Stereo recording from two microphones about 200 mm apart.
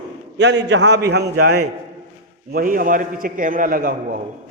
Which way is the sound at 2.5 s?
45° right (ahead or behind).